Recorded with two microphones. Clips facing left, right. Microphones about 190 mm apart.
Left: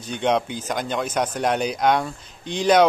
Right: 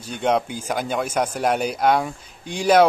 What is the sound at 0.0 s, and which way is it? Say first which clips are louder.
A man's voice: even; 5° right (ahead or behind).